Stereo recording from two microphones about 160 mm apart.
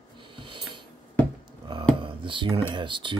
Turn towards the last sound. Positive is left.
turn(degrees=-30)  # may be behind; listen again after turning